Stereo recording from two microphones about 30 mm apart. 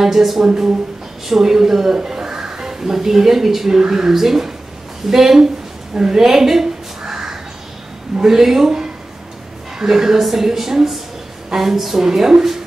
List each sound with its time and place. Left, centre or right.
0.0 s a woman's voice: centre
5.9 s crow: centre
8.2 s a woman's voice: centre
9.8 s a woman's voice: centre